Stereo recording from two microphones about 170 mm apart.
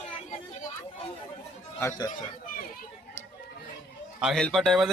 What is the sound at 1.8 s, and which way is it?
Speech, 15° left (ahead or behind).